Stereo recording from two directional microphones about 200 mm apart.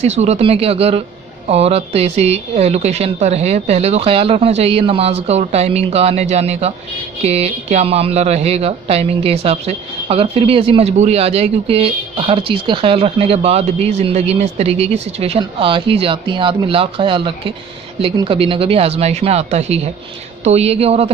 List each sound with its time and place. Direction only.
0.0 s a woman's voice: 35° right (ahead or behind)